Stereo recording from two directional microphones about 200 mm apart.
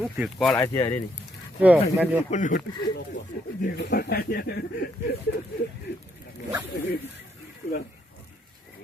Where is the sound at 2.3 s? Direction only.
40° left (ahead or behind).